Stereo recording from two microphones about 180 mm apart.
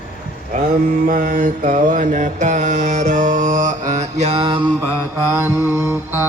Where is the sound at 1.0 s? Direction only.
50° right (ahead or behind); by 4.7 s 30° right (ahead or behind).